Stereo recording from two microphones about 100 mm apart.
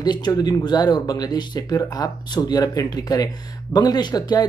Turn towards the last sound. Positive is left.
turn(degrees=45)  # may be behind; listen again after turning